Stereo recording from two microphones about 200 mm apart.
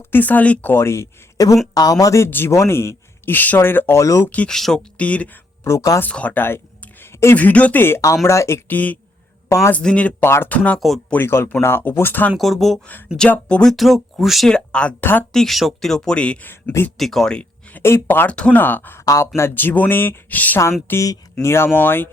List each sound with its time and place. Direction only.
0.0 s a man's voice: 10° left (ahead or behind)